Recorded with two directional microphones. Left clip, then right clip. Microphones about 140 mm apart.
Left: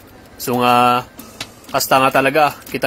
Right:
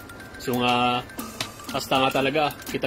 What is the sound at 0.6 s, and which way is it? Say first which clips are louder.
Speech: left 10 dB; 20° left (ahead or behind).